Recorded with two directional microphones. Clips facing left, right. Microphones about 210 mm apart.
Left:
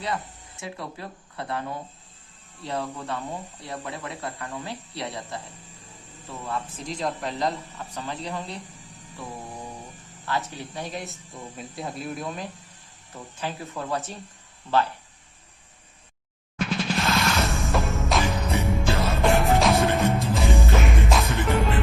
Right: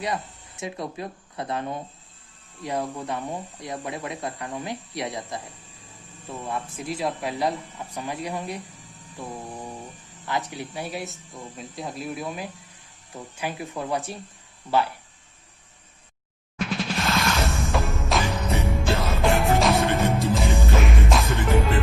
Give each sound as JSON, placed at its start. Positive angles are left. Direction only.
{"t": 0.6, "sound": "speech", "side_deg": -20}
{"t": 6.4, "sound": "speech", "side_deg": -15}
{"t": 10.2, "sound": "speech", "side_deg": -15}
{"t": 16.6, "sound": "music", "side_deg": 0}